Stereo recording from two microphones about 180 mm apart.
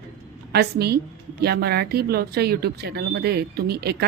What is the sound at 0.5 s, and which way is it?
Speech, 65° right (ahead or behind).